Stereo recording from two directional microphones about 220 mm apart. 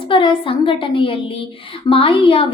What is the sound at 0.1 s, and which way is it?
A woman's voice, 25° left (ahead or behind).